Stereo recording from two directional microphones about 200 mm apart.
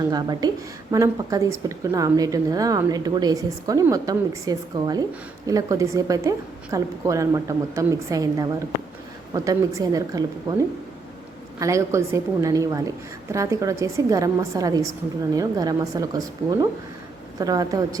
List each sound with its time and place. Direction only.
0.1 s a woman's voice: 20° right (ahead or behind)
11.6 s a woman's voice: 15° right (ahead or behind)